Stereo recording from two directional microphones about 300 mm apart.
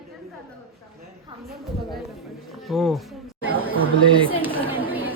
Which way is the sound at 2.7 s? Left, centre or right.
Centre.